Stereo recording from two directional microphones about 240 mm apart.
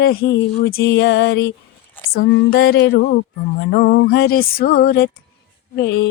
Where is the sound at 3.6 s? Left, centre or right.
Left.